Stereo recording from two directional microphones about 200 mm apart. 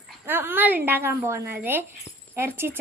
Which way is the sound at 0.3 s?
10° right (ahead or behind).